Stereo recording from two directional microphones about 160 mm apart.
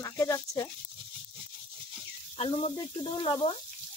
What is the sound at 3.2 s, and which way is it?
Speech, 35° left (ahead or behind).